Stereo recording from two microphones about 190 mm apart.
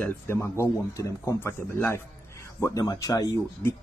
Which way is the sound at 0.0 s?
15° left (ahead or behind).